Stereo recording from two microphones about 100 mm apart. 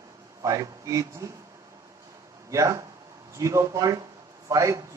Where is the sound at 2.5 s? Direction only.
35° right (ahead or behind).